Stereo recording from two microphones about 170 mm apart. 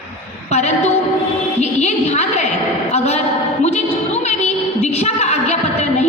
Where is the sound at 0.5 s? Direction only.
40° left (ahead or behind).